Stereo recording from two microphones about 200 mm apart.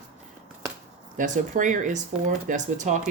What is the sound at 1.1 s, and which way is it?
Speech, 40° right (ahead or behind).